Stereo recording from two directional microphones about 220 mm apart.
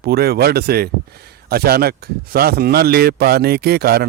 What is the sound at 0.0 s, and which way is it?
Speech, 45° right (ahead or behind).